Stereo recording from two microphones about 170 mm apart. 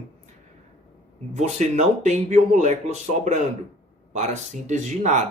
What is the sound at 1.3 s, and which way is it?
Speech, 45° right (ahead or behind).